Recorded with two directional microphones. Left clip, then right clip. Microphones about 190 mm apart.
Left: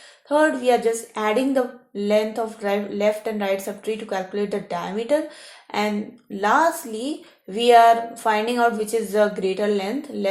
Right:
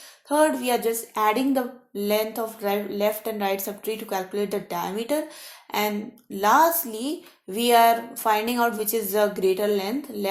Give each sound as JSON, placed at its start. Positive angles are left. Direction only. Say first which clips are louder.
{"t": 0.6, "sound": "a woman's voice", "louder": "left 5 dB", "side_deg": -35}